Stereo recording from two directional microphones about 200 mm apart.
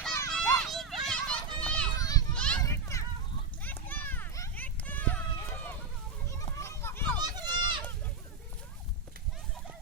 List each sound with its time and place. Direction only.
0.3 s children playing: 5° left (ahead or behind)
2.0 s children playing: 20° left (ahead or behind)
2.3 s children playing: 5° left (ahead or behind)
3.6 s a sound: 10° left (ahead or behind)
7.2 s run: 20° right (ahead or behind)